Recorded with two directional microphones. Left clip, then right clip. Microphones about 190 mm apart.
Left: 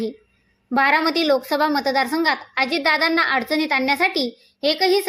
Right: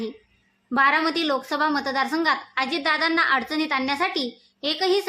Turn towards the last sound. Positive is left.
turn(degrees=15)  # may be behind; listen again after turning